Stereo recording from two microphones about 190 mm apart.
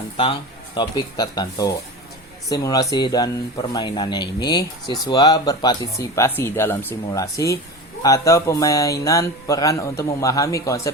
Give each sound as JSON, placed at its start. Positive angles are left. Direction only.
{"t": 0.2, "sound": "speech", "side_deg": 25}